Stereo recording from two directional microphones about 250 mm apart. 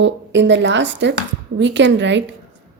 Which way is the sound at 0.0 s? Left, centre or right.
Right.